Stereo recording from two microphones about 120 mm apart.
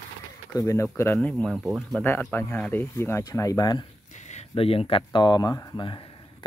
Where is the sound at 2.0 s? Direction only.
20° left (ahead or behind).